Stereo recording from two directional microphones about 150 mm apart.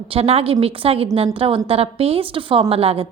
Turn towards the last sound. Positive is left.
turn(degrees=-40)  # may be behind; listen again after turning